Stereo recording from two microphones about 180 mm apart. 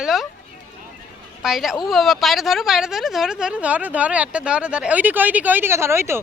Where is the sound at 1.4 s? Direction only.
Centre (ahead or behind).